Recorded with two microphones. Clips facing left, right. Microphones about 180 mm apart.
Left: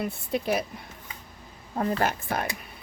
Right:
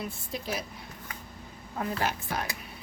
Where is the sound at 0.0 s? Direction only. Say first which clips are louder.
Left 7 dB; 60° left (ahead or behind).